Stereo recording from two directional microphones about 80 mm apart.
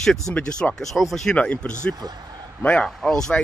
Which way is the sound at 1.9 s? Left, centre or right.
Right.